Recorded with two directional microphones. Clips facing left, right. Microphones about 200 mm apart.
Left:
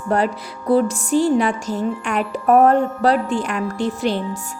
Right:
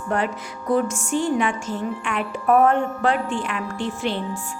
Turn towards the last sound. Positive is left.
turn(degrees=40)  # may be behind; listen again after turning